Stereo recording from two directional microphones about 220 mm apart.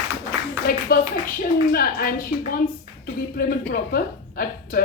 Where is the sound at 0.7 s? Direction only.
40° left (ahead or behind).